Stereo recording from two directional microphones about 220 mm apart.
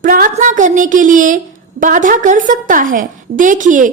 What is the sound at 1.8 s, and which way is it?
A woman's voice, 35° right (ahead or behind).